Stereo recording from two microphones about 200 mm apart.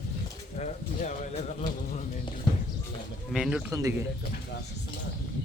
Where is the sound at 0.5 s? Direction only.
35° left (ahead or behind).